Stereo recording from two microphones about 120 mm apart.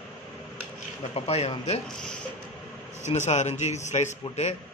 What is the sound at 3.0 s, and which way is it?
A man's voice, 70° left (ahead or behind).